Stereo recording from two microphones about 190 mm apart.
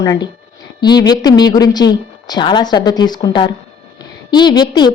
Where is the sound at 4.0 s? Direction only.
25° left (ahead or behind).